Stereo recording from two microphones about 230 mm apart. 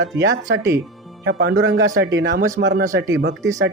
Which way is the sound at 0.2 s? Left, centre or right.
Right.